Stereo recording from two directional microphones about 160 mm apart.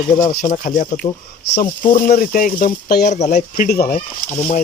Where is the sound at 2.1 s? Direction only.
60° left (ahead or behind); by 3.1 s 80° left.